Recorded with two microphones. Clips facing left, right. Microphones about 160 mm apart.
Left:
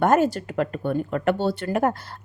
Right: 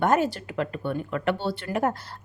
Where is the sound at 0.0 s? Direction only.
45° left (ahead or behind).